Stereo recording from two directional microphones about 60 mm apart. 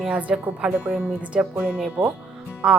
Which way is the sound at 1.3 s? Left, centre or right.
Right.